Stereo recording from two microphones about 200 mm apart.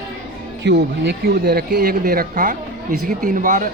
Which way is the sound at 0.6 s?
60° right (ahead or behind).